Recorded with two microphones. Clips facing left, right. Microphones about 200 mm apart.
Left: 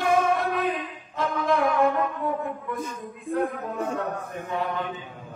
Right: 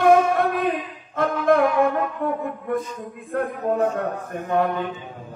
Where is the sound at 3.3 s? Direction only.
55° right (ahead or behind).